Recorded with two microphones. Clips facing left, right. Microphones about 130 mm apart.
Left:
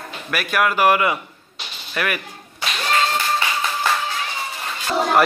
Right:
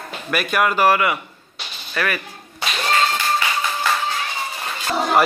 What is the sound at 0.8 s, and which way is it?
Speech, 20° left (ahead or behind).